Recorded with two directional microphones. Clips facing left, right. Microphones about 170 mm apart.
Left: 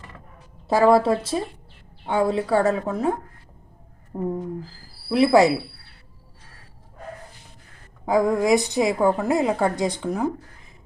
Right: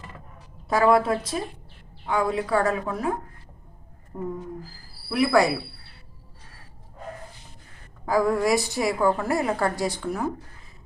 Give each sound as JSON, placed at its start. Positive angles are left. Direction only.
{"t": 0.7, "sound": "a woman's voice", "side_deg": 25}
{"t": 8.0, "sound": "a woman's voice", "side_deg": 20}